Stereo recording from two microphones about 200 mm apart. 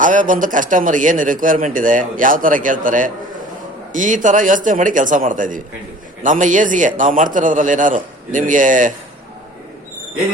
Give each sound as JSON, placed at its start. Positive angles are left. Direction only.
{"t": 0.0, "sound": "a man's voice", "side_deg": -40}